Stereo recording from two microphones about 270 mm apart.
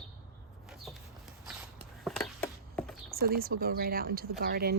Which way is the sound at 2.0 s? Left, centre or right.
Centre.